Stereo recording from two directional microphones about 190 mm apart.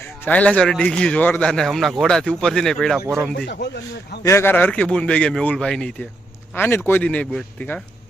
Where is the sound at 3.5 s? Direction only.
65° left (ahead or behind).